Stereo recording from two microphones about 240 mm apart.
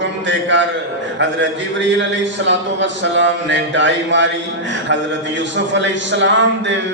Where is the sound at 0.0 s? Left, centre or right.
Right.